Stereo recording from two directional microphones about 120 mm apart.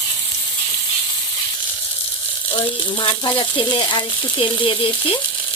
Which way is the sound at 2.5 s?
40° left (ahead or behind).